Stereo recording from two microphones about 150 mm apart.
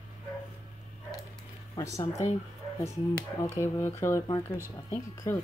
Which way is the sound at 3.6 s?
15° left (ahead or behind).